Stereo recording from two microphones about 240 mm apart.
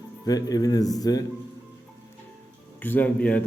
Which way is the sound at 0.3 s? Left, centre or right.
Centre.